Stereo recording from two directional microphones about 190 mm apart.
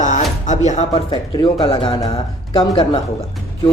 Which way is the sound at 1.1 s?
25° left (ahead or behind).